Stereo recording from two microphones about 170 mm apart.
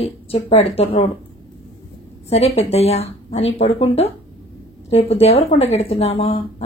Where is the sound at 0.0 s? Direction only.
35° left (ahead or behind).